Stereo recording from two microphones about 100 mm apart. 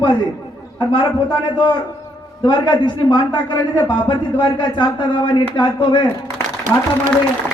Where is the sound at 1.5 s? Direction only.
50° left (ahead or behind).